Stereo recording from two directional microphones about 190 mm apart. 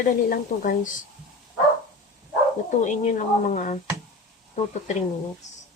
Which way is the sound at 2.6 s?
40° left (ahead or behind).